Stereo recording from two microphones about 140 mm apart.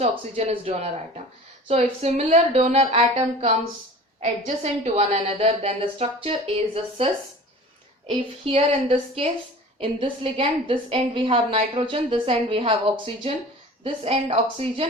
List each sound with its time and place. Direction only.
0.0 s a woman's voice: 45° right (ahead or behind)
4.2 s a woman's voice: 55° right (ahead or behind)
8.0 s a woman's voice: 40° right (ahead or behind)